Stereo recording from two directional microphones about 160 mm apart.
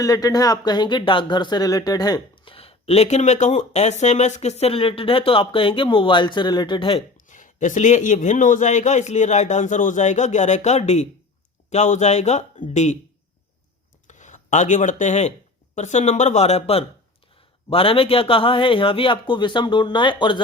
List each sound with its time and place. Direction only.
0.0 s speech: 20° left (ahead or behind)
7.3 s a man's voice: 50° left (ahead or behind)
14.1 s a man's voice: 50° left (ahead or behind); by 20.4 s 30° left (ahead or behind)